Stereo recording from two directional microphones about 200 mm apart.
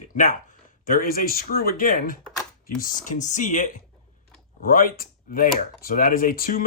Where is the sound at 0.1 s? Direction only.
40° left (ahead or behind).